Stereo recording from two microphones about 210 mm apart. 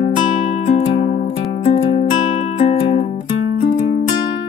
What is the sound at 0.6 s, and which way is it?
Music, 30° left (ahead or behind).